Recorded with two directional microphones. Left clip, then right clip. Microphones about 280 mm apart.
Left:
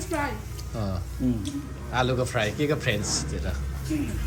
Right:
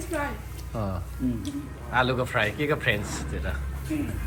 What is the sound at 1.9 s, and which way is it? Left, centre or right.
A man's voice, centre.